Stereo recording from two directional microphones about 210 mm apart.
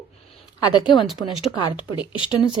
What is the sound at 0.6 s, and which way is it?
Speech, 20° left (ahead or behind).